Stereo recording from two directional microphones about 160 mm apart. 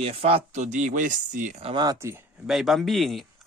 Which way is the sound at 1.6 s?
25° right (ahead or behind).